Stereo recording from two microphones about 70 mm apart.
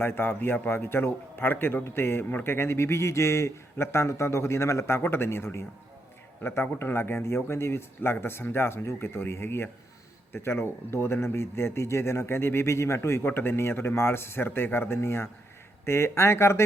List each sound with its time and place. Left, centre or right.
0.0 s a man's voice: left